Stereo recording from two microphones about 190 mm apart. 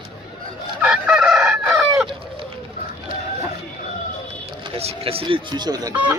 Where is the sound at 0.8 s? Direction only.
5° right (ahead or behind).